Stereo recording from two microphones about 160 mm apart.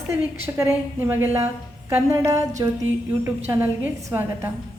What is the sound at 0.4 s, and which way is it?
A woman's voice, 15° right (ahead or behind).